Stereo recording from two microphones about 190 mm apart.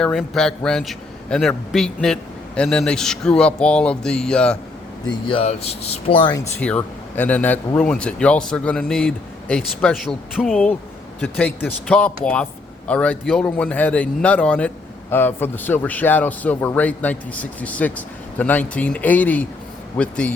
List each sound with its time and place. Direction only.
0.0 s speech: 5° left (ahead or behind)
5.0 s speech: 25° left (ahead or behind)
6.6 s a man's voice: 5° left (ahead or behind)